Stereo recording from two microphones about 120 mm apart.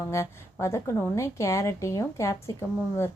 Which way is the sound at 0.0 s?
25° left (ahead or behind).